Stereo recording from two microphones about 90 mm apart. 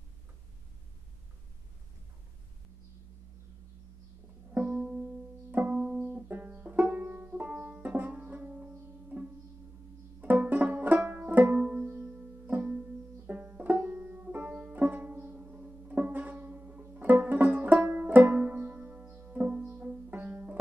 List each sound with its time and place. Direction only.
4.7 s music: 5° right (ahead or behind)
5.5 s music: 20° right (ahead or behind)
6.2 s banjo: 20° right (ahead or behind)